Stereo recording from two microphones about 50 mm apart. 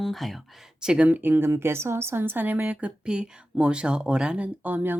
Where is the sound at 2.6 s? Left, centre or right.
Right.